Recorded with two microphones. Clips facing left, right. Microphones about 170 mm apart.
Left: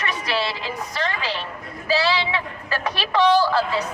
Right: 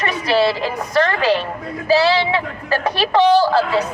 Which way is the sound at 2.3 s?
30° right (ahead or behind).